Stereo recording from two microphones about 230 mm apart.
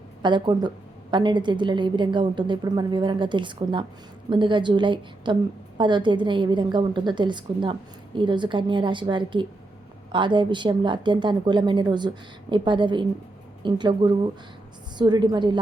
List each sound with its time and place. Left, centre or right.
0.2 s a woman's voice: centre